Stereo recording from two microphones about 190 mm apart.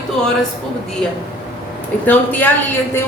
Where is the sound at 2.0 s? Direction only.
10° left (ahead or behind).